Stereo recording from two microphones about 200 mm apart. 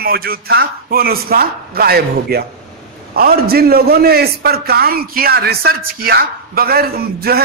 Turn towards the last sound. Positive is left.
turn(degrees=-50)  # may be behind; listen again after turning